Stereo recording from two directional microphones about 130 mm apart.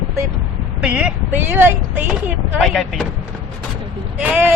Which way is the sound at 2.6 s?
Centre (ahead or behind).